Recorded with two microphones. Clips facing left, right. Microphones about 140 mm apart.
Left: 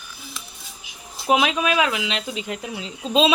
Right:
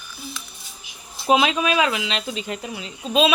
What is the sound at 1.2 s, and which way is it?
Speech, 5° left (ahead or behind).